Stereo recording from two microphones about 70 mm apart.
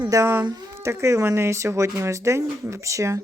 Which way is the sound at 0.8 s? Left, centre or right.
Right.